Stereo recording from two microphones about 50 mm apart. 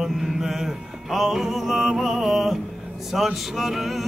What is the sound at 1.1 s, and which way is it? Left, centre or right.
Music, centre.